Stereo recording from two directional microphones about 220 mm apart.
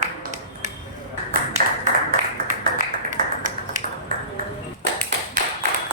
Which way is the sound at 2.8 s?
35° right (ahead or behind).